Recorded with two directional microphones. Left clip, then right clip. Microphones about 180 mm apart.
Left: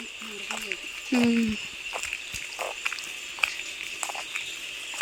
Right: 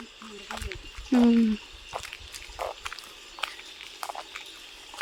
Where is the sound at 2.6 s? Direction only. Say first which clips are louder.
Left 2 dB; 5° left (ahead or behind).